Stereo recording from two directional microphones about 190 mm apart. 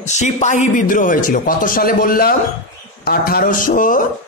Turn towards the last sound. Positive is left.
turn(degrees=45)  # may be behind; listen again after turning